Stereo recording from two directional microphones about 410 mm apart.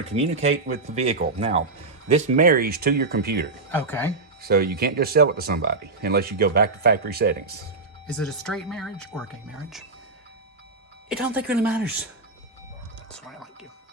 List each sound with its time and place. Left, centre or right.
0.9 s speech: centre
3.7 s speech: centre
4.4 s speech: right
8.1 s speech: centre
11.2 s speech: centre
13.1 s a sound: centre